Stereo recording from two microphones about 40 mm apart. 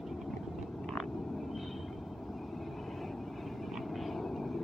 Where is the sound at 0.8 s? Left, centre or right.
Centre.